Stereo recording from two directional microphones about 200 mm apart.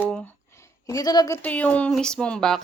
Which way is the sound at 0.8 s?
20° left (ahead or behind).